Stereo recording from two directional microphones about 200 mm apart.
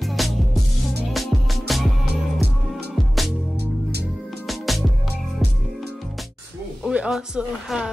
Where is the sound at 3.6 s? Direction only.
55° right (ahead or behind).